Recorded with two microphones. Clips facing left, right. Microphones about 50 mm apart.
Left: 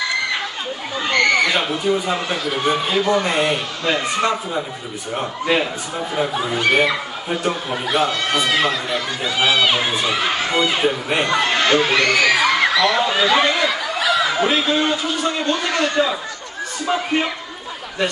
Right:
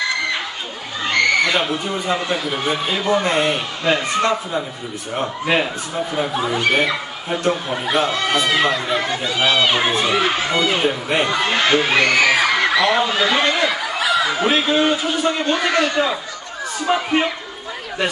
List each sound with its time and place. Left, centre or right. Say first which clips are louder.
1.1 s speech: even; centre
4.0 s speech: right 1 dB; centre